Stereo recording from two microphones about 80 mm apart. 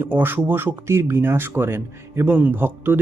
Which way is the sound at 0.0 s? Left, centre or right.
Right.